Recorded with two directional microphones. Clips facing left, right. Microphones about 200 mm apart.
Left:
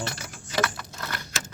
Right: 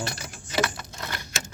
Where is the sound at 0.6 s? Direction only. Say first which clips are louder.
Right 1 dB; 20° right (ahead or behind).